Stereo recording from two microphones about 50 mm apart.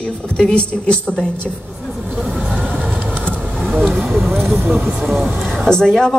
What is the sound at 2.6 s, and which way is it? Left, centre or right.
Vehicle, centre.